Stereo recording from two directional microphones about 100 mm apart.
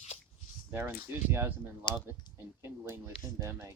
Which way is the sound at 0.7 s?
25° right (ahead or behind).